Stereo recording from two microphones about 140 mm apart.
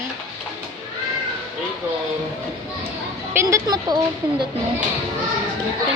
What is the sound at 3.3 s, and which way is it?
Speech, 25° right (ahead or behind).